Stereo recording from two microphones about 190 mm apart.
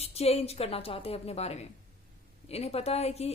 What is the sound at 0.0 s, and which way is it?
A woman's voice, 35° left (ahead or behind).